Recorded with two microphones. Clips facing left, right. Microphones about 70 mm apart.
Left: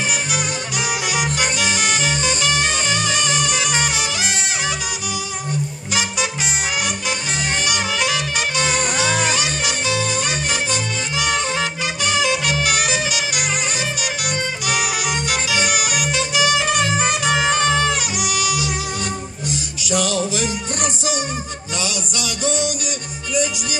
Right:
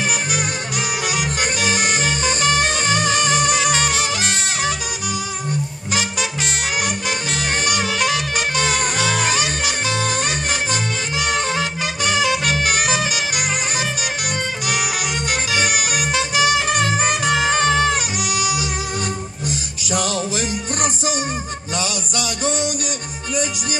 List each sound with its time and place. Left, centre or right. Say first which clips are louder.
0.3 s music: even; right
7.6 s music: right 2 dB; right
14.7 s music: left 2 dB; right